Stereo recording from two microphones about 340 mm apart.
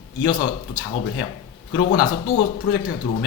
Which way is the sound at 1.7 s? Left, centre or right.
Left.